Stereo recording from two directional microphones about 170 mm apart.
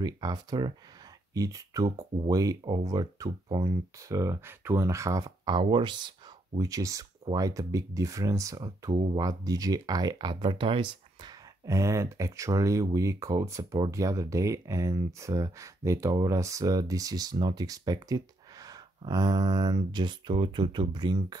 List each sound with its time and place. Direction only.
0.0 s speech: 25° right (ahead or behind)